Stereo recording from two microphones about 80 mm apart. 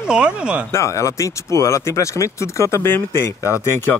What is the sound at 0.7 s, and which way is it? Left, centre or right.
Speech, left.